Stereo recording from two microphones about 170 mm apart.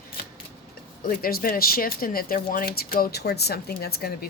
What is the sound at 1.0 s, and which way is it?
A woman's voice, 60° left (ahead or behind).